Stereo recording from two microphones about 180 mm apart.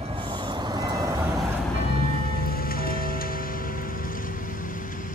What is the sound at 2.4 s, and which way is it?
Music, 55° left (ahead or behind).